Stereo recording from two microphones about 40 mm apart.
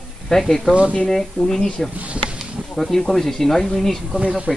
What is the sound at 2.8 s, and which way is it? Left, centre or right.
Speech, centre.